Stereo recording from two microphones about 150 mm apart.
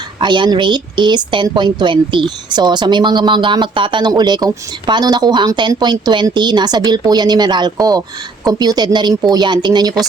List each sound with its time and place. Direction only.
0.2 s a woman's voice: 30° right (ahead or behind)